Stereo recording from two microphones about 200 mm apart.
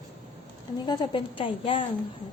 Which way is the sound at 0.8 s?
20° left (ahead or behind).